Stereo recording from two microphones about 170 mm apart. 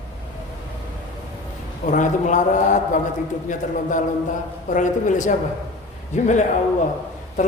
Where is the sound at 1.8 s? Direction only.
50° left (ahead or behind).